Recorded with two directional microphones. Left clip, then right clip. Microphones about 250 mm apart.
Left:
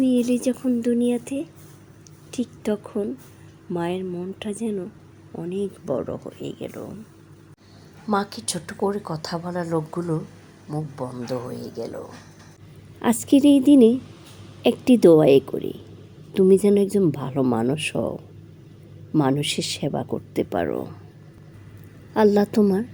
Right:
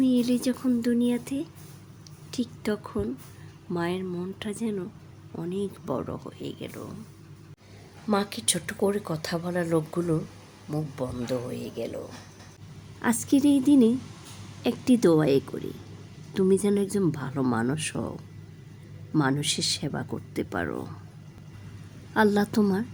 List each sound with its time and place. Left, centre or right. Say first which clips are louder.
0.0 s a woman's voice: left 4 dB; centre
8.1 s speech: left 2 dB; centre
13.2 s speech: left 7 dB; centre
22.1 s speech: left 5 dB; centre